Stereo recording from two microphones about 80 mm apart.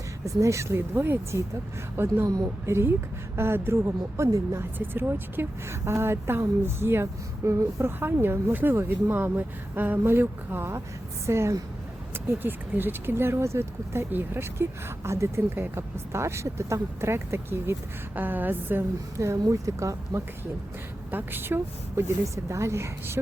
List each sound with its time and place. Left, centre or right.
0.3 s speech: right
19.1 s speech: right
21.1 s speech: right